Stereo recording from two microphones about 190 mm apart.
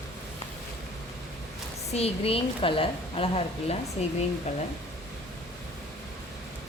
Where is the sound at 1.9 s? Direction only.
30° left (ahead or behind).